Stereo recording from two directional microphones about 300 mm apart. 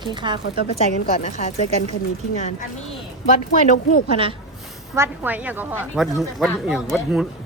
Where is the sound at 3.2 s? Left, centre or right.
Left.